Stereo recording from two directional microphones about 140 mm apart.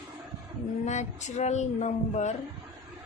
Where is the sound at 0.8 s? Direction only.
55° left (ahead or behind).